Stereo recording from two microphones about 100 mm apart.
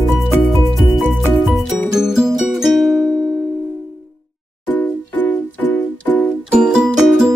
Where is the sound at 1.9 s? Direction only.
5° right (ahead or behind).